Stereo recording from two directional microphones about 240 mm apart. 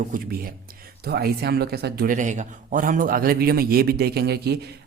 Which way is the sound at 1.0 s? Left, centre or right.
Right.